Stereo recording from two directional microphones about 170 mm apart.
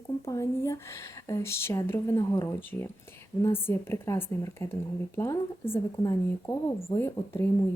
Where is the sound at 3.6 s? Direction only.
15° left (ahead or behind).